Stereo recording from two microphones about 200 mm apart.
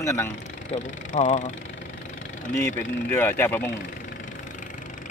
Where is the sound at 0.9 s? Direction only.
35° left (ahead or behind).